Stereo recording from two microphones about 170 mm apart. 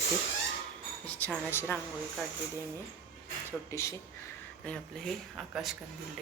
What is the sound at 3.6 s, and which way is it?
Speech, 15° left (ahead or behind).